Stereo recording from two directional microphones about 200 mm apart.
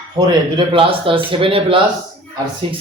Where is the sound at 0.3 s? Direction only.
25° right (ahead or behind).